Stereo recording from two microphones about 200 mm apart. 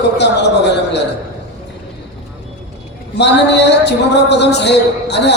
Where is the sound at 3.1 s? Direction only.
60° left (ahead or behind).